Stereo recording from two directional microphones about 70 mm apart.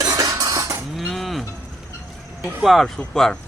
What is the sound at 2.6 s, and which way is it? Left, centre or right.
Speech, centre.